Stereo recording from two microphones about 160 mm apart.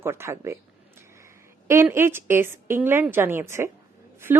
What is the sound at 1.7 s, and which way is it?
Speech, 15° right (ahead or behind).